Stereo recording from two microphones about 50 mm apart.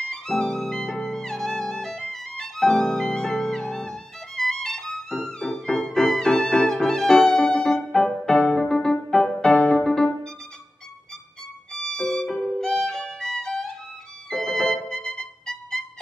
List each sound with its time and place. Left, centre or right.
0.1 s music: centre
11.7 s violin: centre